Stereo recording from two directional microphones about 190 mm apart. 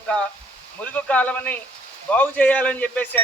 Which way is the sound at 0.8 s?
5° left (ahead or behind).